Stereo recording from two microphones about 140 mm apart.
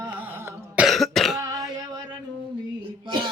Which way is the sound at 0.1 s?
15° right (ahead or behind).